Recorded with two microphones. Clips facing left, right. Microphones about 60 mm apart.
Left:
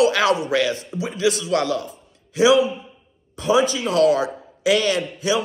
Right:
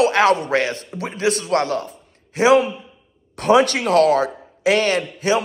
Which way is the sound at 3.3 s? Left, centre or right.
Right.